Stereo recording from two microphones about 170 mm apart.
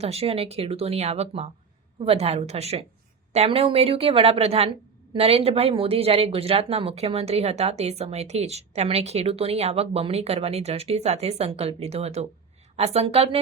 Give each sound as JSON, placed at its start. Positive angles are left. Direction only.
{"t": 0.0, "sound": "speech", "side_deg": -35}